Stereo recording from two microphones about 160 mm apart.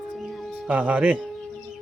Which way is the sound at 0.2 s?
Centre (ahead or behind).